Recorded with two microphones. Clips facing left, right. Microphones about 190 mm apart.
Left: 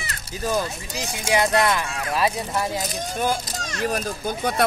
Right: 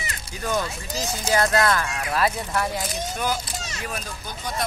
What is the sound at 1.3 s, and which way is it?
Speech, 15° left (ahead or behind).